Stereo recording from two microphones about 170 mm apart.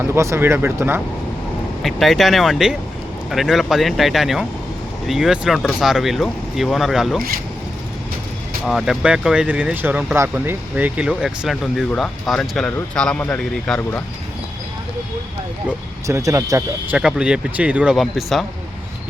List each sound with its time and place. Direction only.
0.0 s speech: 15° right (ahead or behind)
1.8 s speech: centre (ahead or behind)
8.6 s speech: centre (ahead or behind)
16.0 s speech: 15° right (ahead or behind)
17.0 s speech: 5° right (ahead or behind)